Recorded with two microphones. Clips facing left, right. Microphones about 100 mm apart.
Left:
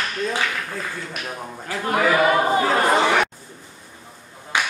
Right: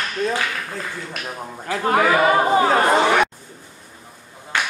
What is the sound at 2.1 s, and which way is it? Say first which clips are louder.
Chatter: left 1 dB; 25° right (ahead or behind).